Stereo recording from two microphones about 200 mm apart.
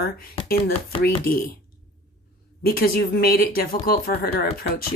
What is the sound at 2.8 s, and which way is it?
Speech, 45° left (ahead or behind).